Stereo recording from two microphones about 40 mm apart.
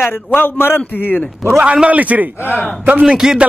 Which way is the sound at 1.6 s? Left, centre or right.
Right.